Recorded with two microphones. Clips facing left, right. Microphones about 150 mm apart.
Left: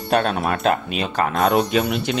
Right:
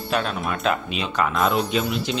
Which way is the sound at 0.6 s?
50° left (ahead or behind).